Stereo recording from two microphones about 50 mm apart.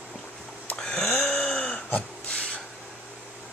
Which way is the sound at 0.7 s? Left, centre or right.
Centre.